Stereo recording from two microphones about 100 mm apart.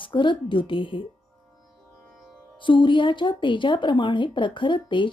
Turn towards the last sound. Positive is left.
turn(degrees=55)  # may be behind; listen again after turning